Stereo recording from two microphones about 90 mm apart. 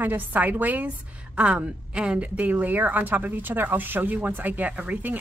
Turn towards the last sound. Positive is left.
turn(degrees=-20)  # may be behind; listen again after turning